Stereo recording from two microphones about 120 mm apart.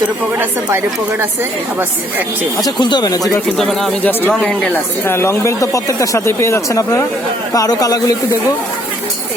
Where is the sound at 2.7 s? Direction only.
40° left (ahead or behind).